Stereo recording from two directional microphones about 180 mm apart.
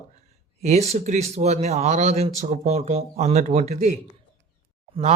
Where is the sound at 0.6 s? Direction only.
40° right (ahead or behind).